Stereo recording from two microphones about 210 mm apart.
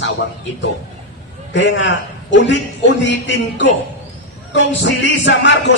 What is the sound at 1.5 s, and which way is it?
Speech, 60° left (ahead or behind).